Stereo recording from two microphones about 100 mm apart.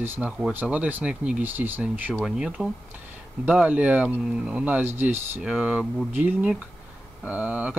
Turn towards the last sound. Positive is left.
turn(degrees=-15)  # may be behind; listen again after turning